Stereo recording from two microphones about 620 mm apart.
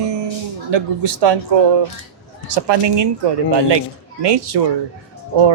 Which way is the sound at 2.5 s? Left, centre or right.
Right.